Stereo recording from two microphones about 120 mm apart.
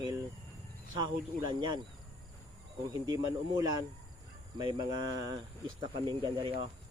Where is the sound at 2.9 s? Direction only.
35° right (ahead or behind).